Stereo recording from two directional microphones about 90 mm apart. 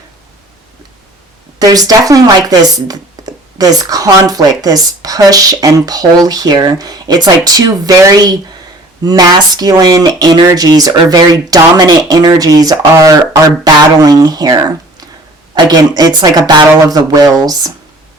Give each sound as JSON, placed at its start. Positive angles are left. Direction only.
{"t": 1.5, "sound": "speech", "side_deg": -45}